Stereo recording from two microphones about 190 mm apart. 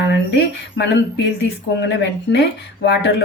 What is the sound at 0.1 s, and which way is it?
Speech, 65° left (ahead or behind).